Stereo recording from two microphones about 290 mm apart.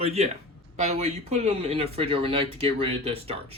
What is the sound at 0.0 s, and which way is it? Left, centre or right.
Speech, right.